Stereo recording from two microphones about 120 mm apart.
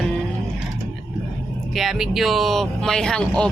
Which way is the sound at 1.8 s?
Centre (ahead or behind).